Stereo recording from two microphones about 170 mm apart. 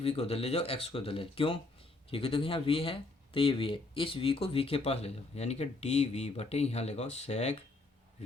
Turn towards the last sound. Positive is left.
turn(degrees=40)  # may be behind; listen again after turning